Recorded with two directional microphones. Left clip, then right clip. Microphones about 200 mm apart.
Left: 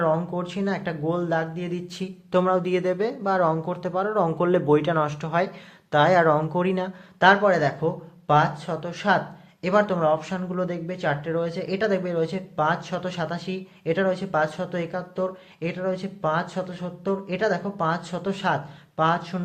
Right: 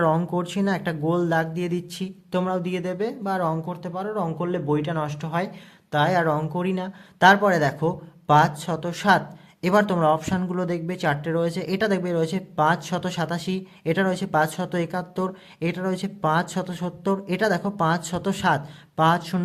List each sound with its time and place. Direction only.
0.0 s speech: 35° right (ahead or behind)
1.9 s speech: 20° right (ahead or behind)
7.2 s speech: 30° right (ahead or behind)